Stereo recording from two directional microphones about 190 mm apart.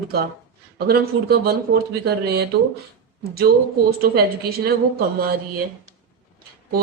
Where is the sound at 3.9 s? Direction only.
55° right (ahead or behind).